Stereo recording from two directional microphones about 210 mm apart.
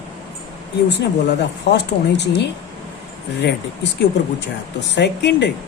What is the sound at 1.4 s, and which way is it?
Speech, 55° left (ahead or behind).